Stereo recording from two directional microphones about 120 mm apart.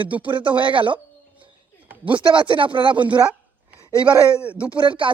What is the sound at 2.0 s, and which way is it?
Speech, 45° right (ahead or behind).